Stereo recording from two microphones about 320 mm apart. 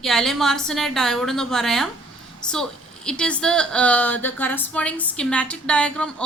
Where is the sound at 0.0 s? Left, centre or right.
Centre.